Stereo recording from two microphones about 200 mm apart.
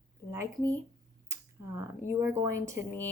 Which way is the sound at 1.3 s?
15° right (ahead or behind).